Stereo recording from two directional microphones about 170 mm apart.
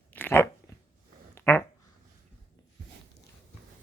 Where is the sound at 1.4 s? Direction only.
15° left (ahead or behind).